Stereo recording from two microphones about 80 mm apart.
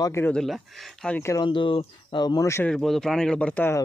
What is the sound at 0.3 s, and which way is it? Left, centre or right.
Speech, centre.